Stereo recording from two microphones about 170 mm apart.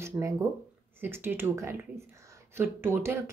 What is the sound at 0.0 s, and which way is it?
Speech, 15° right (ahead or behind).